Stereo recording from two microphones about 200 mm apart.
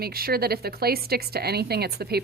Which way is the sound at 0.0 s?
50° right (ahead or behind).